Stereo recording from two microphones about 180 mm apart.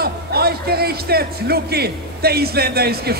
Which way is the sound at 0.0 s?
60° right (ahead or behind).